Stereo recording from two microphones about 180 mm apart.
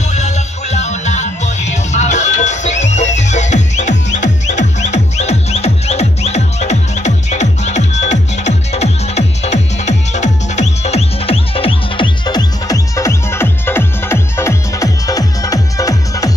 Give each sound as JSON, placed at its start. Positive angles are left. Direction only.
{"t": 0.1, "sound": "music", "side_deg": 40}